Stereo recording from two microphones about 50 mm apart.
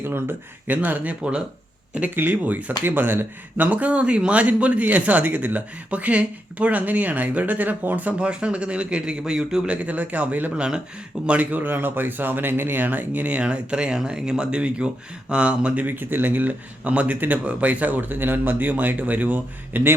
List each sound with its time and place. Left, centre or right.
0.0 s speech: right
0.7 s speech: right
2.1 s speech: right
3.7 s speech: right
8.3 s speech: right
9.6 s speech: right